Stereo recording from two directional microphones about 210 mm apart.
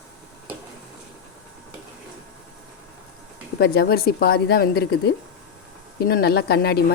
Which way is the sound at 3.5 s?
50° left (ahead or behind).